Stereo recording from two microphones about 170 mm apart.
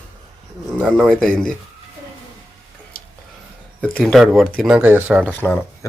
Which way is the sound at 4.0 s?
Centre (ahead or behind).